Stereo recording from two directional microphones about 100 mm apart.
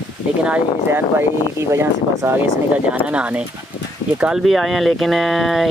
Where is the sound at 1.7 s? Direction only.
25° right (ahead or behind).